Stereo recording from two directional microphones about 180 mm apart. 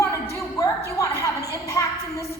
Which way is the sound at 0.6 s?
20° left (ahead or behind).